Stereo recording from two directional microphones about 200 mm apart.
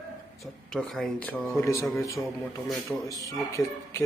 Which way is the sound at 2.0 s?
15° left (ahead or behind).